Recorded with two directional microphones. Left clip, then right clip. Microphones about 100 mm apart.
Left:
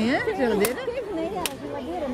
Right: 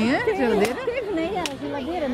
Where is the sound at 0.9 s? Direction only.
35° right (ahead or behind).